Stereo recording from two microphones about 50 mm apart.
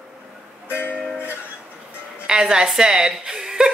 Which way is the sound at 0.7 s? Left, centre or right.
Left.